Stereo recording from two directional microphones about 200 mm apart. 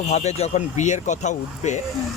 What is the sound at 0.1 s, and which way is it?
Speech, 35° left (ahead or behind).